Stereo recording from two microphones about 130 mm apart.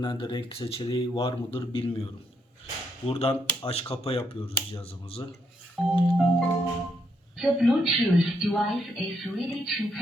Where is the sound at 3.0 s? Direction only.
50° left (ahead or behind).